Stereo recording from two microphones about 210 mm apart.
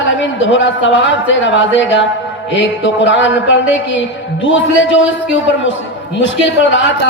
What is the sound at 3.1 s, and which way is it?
Speech, 65° left (ahead or behind).